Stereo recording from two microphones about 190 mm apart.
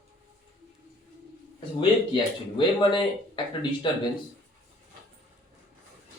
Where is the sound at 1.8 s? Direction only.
25° left (ahead or behind).